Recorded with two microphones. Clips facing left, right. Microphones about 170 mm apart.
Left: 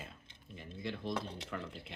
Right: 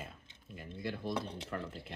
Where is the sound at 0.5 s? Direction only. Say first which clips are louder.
Right 1 dB; 5° right (ahead or behind).